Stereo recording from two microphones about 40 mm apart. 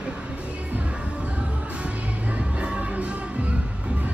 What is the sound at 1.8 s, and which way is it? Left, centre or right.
Music, right.